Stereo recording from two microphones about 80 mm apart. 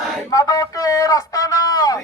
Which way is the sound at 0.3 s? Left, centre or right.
Left.